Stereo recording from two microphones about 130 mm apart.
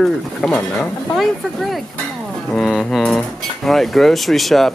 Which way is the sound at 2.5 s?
Centre (ahead or behind).